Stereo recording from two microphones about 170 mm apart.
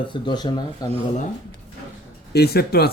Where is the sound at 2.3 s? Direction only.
70° left (ahead or behind).